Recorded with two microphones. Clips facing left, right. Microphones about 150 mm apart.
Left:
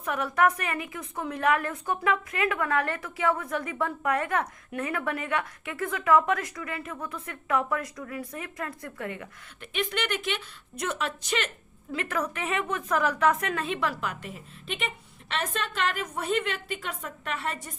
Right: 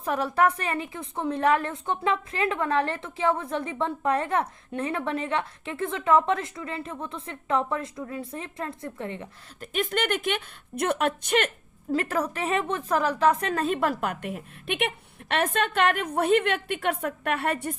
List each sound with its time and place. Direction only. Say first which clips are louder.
0.0 s a woman's voice: right 1 dB; 30° right (ahead or behind)
9.6 s a woman's voice: right 3 dB; 45° right (ahead or behind)